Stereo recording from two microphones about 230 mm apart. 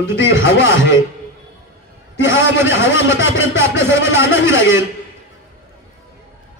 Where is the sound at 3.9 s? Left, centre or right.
Left.